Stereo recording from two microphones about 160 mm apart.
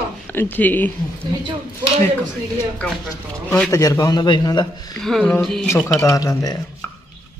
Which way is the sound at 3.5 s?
15° left (ahead or behind).